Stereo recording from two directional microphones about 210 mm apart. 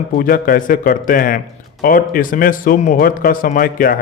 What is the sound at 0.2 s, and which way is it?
Speech, 45° left (ahead or behind).